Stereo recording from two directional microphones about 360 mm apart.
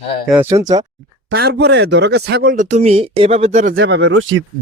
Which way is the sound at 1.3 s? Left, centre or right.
Right.